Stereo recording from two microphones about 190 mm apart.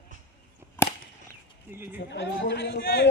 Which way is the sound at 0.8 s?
10° left (ahead or behind).